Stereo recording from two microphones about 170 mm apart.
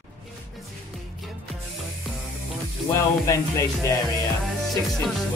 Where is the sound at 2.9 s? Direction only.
15° left (ahead or behind).